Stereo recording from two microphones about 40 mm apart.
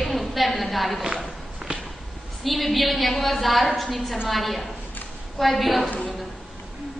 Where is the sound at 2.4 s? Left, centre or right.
Centre.